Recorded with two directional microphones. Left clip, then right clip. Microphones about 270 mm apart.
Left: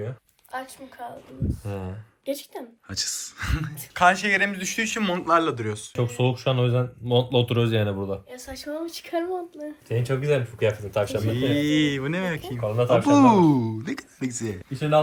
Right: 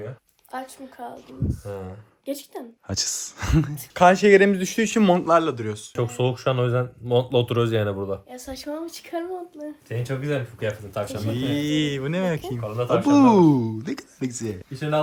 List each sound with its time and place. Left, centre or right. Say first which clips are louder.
0.5 s speech: even; right
1.5 s speech: right 1 dB; left
2.2 s speech: left 1 dB; centre
2.8 s speech: right 3 dB; right
4.9 s speech: right 4 dB; right; by 8.2 s centre
8.4 s speech: right 2 dB; right
8.7 s speech: left 3 dB; centre
10.9 s speech: left 4 dB; left
11.2 s speech: left 2 dB; centre
12.5 s speech: left 4 dB; left
13.1 s speech: right 2 dB; centre
14.7 s speech: left 3 dB; left